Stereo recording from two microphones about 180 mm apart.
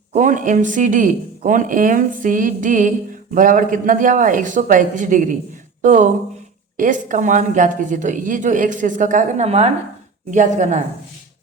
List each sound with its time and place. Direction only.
0.1 s speech: 45° right (ahead or behind)